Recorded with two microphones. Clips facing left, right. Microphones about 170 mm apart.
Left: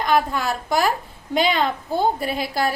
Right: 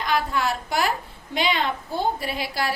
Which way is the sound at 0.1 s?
40° left (ahead or behind).